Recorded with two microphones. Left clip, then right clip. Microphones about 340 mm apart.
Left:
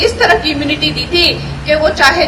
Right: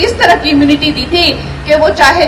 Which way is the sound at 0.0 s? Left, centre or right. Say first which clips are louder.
Right 2 dB; right.